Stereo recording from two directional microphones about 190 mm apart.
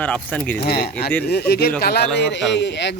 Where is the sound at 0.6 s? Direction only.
55° left (ahead or behind).